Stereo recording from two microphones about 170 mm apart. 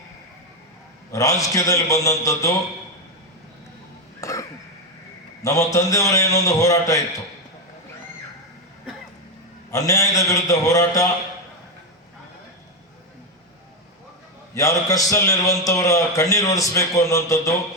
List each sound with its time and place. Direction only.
1.1 s a man's voice: 20° left (ahead or behind)
4.2 s throat clearing: 20° left (ahead or behind)
5.4 s a man's voice: 20° left (ahead or behind)
9.7 s a man's voice: 20° left (ahead or behind)
14.5 s a man's voice: 20° left (ahead or behind)